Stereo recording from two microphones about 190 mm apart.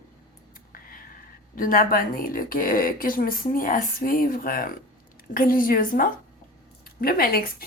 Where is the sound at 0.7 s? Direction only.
50° left (ahead or behind).